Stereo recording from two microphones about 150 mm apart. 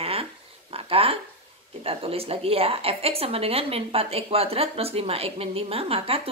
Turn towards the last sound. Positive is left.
turn(degrees=-40)  # may be behind; listen again after turning